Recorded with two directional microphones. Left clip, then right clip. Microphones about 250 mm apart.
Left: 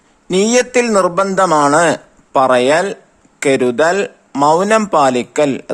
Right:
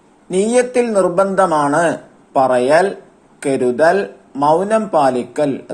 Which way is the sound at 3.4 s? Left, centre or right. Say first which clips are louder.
Left 2 dB; left.